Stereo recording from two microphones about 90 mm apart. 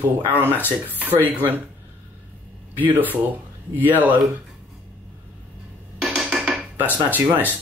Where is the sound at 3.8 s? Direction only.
20° right (ahead or behind).